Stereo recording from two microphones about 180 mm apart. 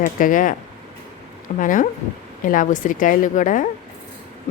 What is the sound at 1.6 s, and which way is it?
Speech, 45° left (ahead or behind).